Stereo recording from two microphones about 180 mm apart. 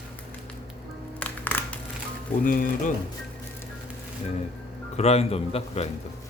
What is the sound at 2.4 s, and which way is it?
Speech, 50° left (ahead or behind).